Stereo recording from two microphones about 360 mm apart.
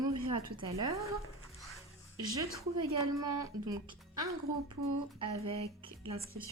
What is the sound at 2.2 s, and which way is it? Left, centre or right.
Speech, centre.